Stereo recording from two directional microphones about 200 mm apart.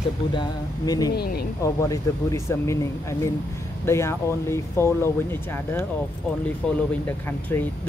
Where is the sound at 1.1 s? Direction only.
50° left (ahead or behind).